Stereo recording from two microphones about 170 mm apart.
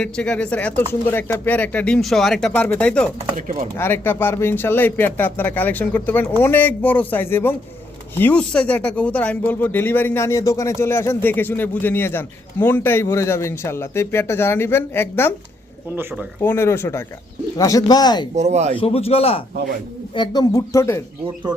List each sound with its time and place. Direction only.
0.0 s speech: 5° left (ahead or behind)
3.3 s speech: 55° right (ahead or behind)
3.8 s speech: 15° left (ahead or behind)
16.4 s speech: 15° left (ahead or behind)
18.3 s speech: 40° right (ahead or behind)
18.8 s speech: 35° left (ahead or behind)
20.1 s speech: 25° left (ahead or behind)